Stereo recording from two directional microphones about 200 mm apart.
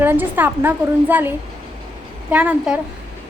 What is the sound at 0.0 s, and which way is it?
A woman's voice, 10° right (ahead or behind).